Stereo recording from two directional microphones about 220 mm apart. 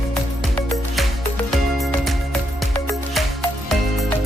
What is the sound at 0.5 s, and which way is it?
Music, 5° left (ahead or behind).